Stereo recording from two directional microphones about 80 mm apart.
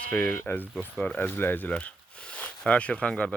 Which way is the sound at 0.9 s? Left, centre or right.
Centre.